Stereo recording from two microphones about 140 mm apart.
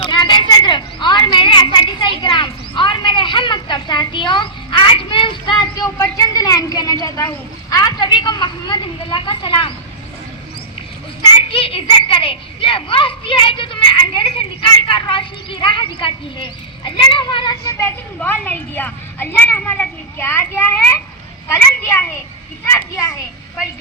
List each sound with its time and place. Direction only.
0.0 s a sound: 35° left (ahead or behind)
11.3 s a child's voice: 40° left (ahead or behind)
17.7 s a woman's voice: 15° left (ahead or behind)